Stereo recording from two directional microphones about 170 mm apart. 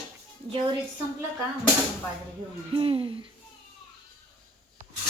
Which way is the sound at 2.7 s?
30° right (ahead or behind).